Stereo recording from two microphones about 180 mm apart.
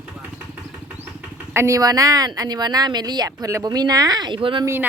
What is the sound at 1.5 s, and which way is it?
Speech, 15° right (ahead or behind).